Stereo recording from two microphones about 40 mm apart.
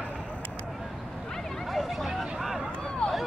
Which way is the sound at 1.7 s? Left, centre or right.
Centre.